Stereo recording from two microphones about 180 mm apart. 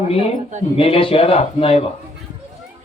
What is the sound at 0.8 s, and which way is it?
Speech, 30° left (ahead or behind).